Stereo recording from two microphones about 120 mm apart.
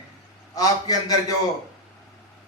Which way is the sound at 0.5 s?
30° left (ahead or behind).